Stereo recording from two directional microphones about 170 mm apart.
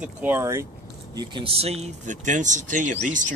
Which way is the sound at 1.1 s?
25° right (ahead or behind).